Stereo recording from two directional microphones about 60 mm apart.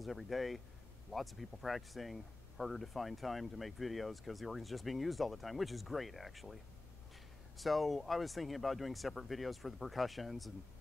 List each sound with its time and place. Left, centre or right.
0.0 s speech: centre